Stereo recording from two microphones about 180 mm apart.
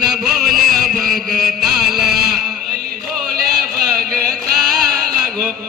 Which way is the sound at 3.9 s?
55° right (ahead or behind).